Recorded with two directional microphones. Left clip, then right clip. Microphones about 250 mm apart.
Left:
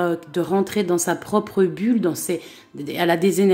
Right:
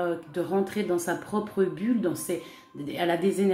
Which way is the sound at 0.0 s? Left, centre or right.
Left.